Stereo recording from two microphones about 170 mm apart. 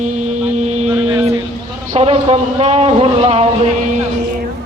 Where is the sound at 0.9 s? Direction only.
10° right (ahead or behind).